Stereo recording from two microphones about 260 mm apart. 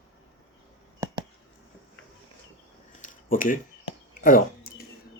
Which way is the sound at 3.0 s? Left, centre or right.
Left.